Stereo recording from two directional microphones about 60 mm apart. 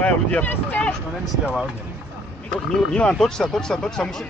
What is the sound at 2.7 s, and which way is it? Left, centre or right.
Speech, centre.